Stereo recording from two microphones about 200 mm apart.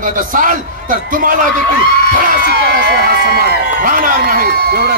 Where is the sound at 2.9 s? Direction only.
50° right (ahead or behind).